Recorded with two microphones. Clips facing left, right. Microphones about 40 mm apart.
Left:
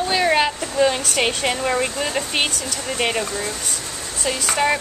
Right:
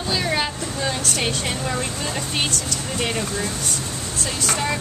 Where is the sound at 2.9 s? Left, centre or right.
Left.